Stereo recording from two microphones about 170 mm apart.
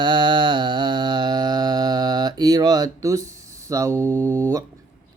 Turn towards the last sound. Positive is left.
turn(degrees=-15)  # may be behind; listen again after turning